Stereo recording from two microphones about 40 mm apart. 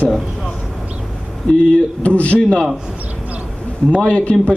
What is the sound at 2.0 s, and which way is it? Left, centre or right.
Speech, left.